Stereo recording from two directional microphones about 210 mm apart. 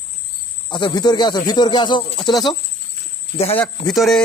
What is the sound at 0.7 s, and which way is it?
Speech, 20° left (ahead or behind).